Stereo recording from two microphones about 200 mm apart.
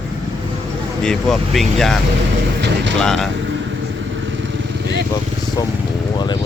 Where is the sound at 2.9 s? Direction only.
5° left (ahead or behind).